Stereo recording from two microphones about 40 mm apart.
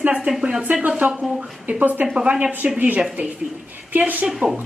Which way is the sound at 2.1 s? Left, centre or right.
Right.